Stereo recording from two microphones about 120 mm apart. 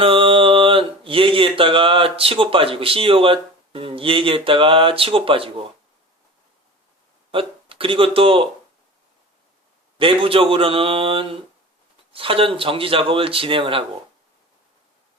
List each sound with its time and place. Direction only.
0.0 s speech: 50° right (ahead or behind)
7.3 s speech: 50° right (ahead or behind)
10.0 s speech: 50° right (ahead or behind)